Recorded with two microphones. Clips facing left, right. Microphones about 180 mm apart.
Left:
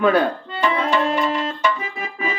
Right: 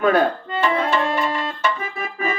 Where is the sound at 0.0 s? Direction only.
45° right (ahead or behind).